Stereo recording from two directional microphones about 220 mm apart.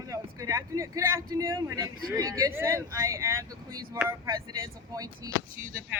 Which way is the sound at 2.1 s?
15° right (ahead or behind).